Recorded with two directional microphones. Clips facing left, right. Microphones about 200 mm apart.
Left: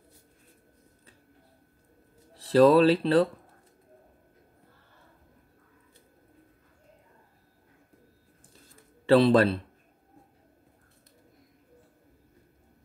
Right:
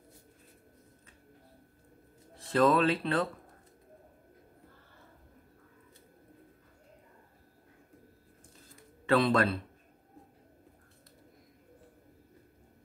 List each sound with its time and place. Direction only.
2.3 s speech: 35° left (ahead or behind)
9.0 s speech: 30° left (ahead or behind)